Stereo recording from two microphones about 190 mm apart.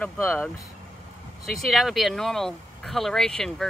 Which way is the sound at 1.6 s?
Centre (ahead or behind).